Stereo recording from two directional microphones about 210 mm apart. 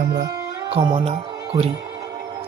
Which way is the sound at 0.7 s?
25° right (ahead or behind).